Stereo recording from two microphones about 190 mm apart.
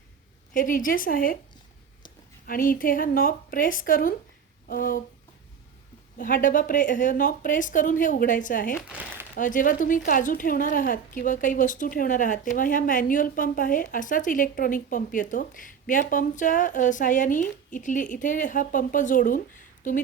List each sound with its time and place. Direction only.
0.5 s a woman's voice: 45° left (ahead or behind)
2.5 s a woman's voice: 45° left (ahead or behind)
6.1 s a woman's voice: 45° left (ahead or behind)
8.8 s crumpling: 5° right (ahead or behind)
9.4 s a woman's voice: 45° left (ahead or behind)